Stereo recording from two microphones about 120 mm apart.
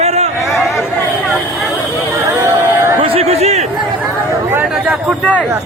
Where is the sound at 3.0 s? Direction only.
55° right (ahead or behind).